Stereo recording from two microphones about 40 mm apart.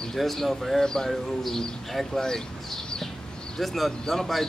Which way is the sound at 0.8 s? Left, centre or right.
Centre.